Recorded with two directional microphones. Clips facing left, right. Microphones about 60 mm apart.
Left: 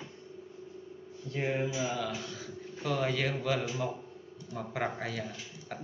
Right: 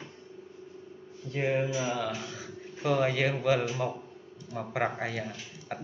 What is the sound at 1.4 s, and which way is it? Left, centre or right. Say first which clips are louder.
Speech: right 3 dB; right.